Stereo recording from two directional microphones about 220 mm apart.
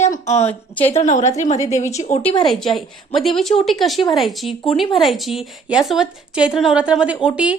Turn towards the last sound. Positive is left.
turn(degrees=-5)  # may be behind; listen again after turning